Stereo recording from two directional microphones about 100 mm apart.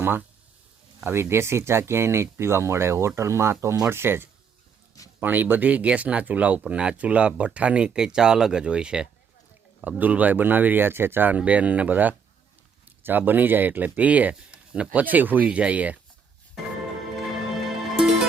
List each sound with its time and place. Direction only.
0.0 s speech: 20° right (ahead or behind)
17.9 s music: 5° right (ahead or behind)